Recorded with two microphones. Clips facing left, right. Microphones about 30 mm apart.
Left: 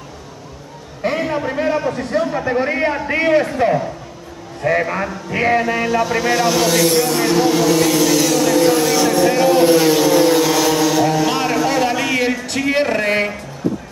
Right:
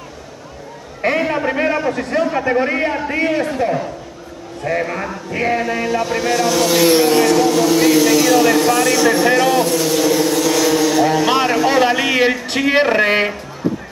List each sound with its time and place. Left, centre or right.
1.0 s a man's voice: centre
2.4 s a man's voice: centre
4.6 s speech: centre
6.9 s speech: right
7.2 s speech: centre
9.1 s vehicle: centre
9.6 s speech: centre
9.9 s vehicle: centre
10.5 s a sound: centre; by 13.3 s right